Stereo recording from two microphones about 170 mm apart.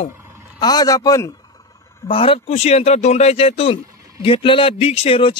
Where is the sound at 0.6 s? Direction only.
25° left (ahead or behind).